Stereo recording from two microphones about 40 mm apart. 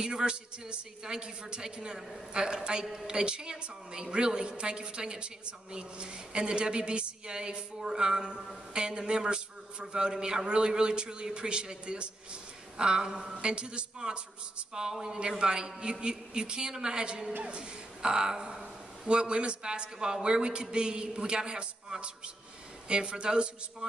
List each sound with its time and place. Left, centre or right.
0.0 s a woman's voice: right